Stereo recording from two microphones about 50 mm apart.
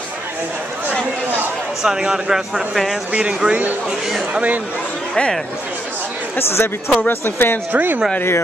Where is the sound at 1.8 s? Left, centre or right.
Centre.